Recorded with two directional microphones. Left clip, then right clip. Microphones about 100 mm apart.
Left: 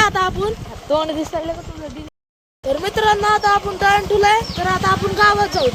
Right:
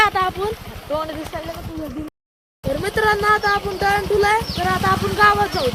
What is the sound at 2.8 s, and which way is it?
Speech, 15° left (ahead or behind).